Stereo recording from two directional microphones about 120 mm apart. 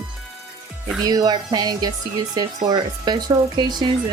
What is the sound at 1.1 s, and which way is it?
Speech, 35° right (ahead or behind).